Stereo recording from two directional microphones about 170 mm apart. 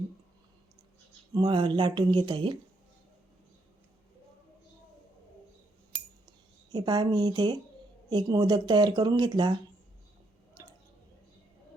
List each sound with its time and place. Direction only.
1.3 s speech: 25° right (ahead or behind)
6.2 s a sound: 25° right (ahead or behind)
8.1 s speech: 25° right (ahead or behind)
10.6 s drip: 20° right (ahead or behind)